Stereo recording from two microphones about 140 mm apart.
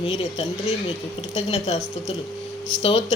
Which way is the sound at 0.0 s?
45° left (ahead or behind).